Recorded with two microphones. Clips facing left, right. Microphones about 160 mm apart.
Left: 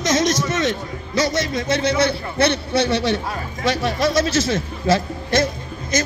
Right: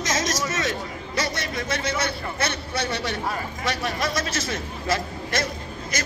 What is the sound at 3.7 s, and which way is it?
Speech, 30° left (ahead or behind).